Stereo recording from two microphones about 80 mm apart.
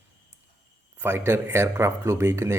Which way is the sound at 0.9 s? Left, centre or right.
Right.